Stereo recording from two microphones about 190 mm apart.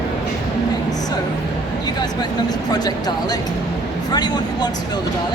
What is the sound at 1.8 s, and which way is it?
Speech, 20° left (ahead or behind).